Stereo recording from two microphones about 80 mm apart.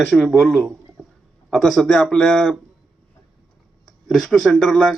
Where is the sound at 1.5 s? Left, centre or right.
Centre.